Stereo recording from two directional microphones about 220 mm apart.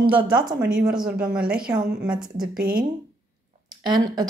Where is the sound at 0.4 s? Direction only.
40° right (ahead or behind).